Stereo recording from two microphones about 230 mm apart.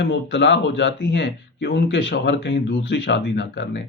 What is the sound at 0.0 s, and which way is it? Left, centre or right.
Speech, left.